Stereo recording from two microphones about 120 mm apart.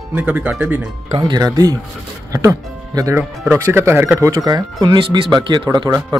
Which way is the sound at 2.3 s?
30° right (ahead or behind).